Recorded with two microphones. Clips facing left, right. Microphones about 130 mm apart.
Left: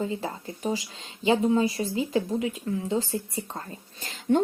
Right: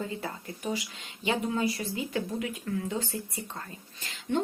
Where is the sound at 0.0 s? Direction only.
25° left (ahead or behind).